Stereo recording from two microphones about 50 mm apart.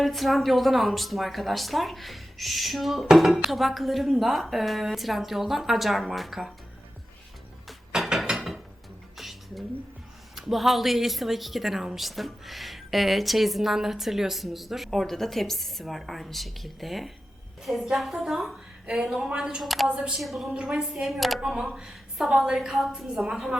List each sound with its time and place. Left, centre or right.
0.0 s a woman's voice: centre
7.7 s a sound: centre
8.1 s mechanisms: centre
9.1 s a sound: centre
10.3 s a woman's voice: centre
18.9 s a woman's voice: centre
19.6 s a woman's voice: centre
20.0 s a woman's voice: centre
20.5 s a woman's voice: centre
21.4 s a woman's voice: centre